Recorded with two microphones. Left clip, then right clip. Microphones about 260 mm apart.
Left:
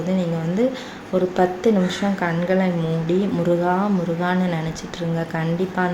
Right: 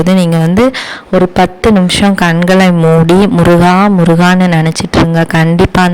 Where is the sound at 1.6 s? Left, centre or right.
Right.